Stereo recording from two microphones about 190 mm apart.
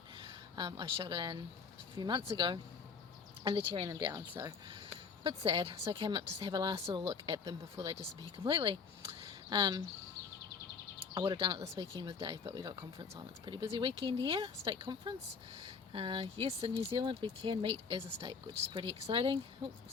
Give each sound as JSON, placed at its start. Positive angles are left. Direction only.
{"t": 0.3, "sound": "speech", "side_deg": -25}
{"t": 9.2, "sound": "a sound", "side_deg": -25}
{"t": 11.1, "sound": "speech", "side_deg": -25}